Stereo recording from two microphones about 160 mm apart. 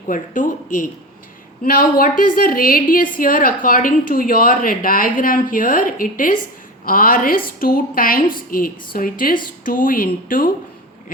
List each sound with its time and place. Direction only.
0.1 s a woman's voice: 55° left (ahead or behind)